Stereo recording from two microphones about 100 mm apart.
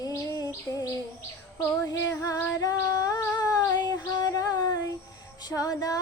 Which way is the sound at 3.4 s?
40° left (ahead or behind).